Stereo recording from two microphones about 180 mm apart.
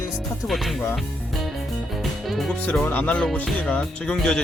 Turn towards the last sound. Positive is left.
turn(degrees=5)  # may be behind; listen again after turning